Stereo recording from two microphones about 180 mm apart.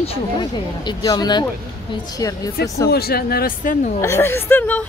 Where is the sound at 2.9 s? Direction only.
60° left (ahead or behind).